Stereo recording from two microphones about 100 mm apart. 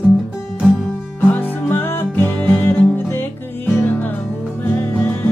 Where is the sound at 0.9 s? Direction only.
15° left (ahead or behind).